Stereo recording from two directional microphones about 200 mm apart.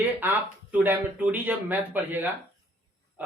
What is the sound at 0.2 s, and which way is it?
Speech, 10° right (ahead or behind).